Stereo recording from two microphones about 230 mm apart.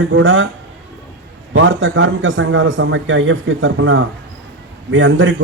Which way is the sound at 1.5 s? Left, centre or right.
Right.